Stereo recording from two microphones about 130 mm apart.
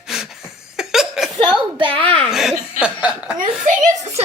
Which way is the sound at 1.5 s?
40° right (ahead or behind).